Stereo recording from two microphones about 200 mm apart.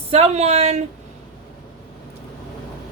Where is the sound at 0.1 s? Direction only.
30° right (ahead or behind).